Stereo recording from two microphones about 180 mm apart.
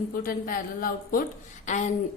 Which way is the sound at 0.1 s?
50° left (ahead or behind).